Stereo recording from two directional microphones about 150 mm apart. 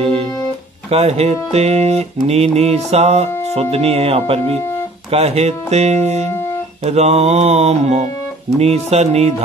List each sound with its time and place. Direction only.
0.8 s music: 45° right (ahead or behind)
3.7 s speech: 45° right (ahead or behind)
5.1 s music: 45° right (ahead or behind)